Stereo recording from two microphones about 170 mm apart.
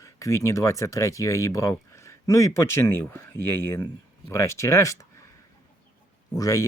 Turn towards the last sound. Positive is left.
turn(degrees=20)  # may be behind; listen again after turning